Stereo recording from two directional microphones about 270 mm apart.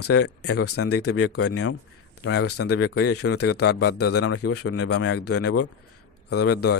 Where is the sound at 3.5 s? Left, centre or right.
Left.